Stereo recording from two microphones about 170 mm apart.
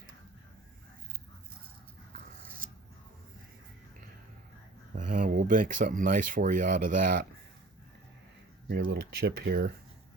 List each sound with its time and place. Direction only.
4.9 s speech: 50° right (ahead or behind)
8.7 s speech: 65° right (ahead or behind)